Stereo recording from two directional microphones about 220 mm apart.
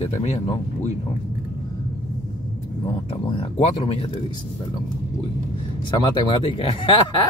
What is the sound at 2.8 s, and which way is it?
Speech, 25° left (ahead or behind).